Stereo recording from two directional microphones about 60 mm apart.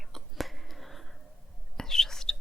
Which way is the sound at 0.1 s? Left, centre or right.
Centre.